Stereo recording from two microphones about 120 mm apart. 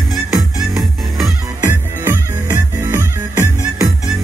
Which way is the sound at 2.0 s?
20° right (ahead or behind).